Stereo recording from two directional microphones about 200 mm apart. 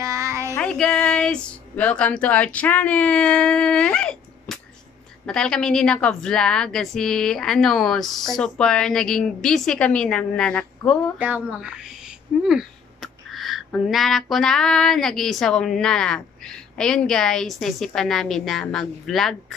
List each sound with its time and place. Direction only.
0.0 s child singing: 15° right (ahead or behind)
0.6 s speech: 5° left (ahead or behind)
11.1 s speech: 10° right (ahead or behind)